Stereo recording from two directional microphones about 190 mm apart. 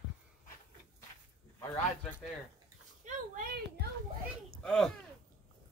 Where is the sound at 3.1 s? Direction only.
50° right (ahead or behind).